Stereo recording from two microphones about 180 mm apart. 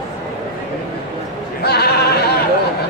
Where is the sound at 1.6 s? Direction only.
60° left (ahead or behind).